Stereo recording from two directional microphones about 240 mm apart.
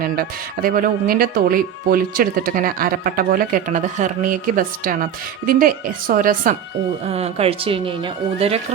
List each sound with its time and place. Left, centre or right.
0.0 s speech: right